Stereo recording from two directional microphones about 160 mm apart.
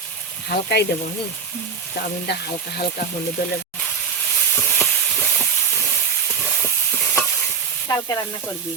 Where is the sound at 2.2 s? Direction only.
90° left.